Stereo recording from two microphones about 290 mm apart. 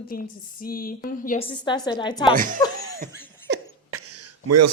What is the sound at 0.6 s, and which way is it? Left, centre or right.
Speech, left.